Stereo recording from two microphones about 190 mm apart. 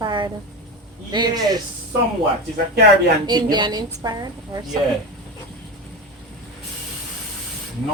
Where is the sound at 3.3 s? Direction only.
25° right (ahead or behind).